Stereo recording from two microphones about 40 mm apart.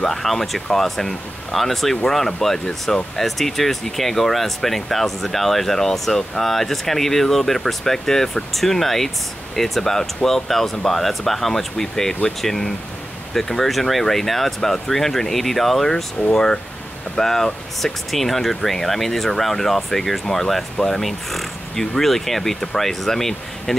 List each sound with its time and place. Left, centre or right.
0.0 s speech: centre